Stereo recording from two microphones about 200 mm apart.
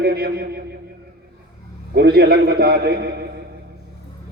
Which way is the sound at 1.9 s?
50° right (ahead or behind).